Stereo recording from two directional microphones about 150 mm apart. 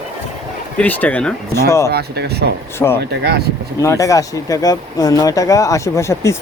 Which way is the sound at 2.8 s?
15° left (ahead or behind).